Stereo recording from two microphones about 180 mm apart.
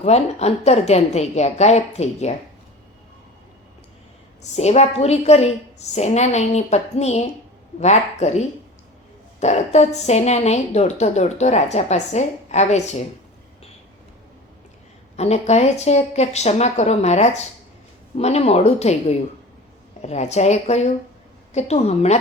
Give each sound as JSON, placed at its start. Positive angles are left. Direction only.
{"t": 0.0, "sound": "a woman's voice", "side_deg": 35}
{"t": 4.5, "sound": "a woman's voice", "side_deg": 40}
{"t": 15.1, "sound": "a woman's voice", "side_deg": 35}